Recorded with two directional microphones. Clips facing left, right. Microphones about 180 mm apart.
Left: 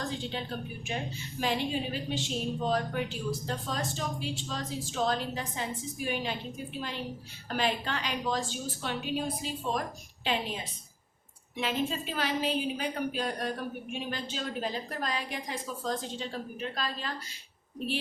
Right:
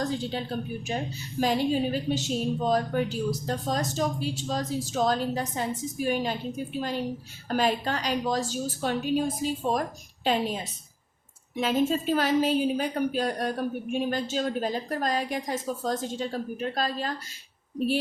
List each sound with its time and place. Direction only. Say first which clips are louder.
0.0 s a woman's voice: right 6 dB; 40° right (ahead or behind)